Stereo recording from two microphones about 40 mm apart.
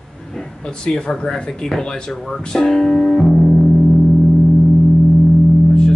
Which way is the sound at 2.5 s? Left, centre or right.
Centre.